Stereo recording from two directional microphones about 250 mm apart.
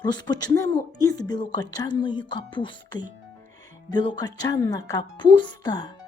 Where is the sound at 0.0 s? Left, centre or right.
Centre.